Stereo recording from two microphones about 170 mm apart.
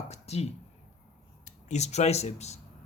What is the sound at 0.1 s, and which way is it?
Speech, 40° left (ahead or behind).